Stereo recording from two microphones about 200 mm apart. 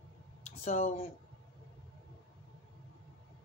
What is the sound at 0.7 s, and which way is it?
Speech, 35° left (ahead or behind).